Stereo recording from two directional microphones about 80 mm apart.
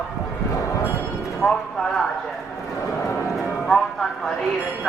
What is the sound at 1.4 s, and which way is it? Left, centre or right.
Speech, centre.